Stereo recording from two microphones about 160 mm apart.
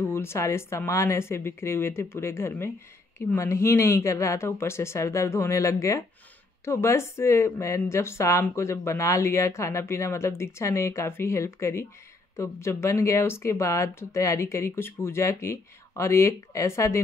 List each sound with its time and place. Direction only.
0.1 s speech: 15° left (ahead or behind)